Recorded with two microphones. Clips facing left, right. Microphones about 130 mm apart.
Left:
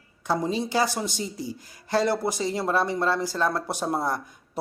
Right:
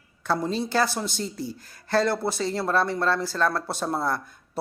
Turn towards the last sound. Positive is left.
turn(degrees=15)  # may be behind; listen again after turning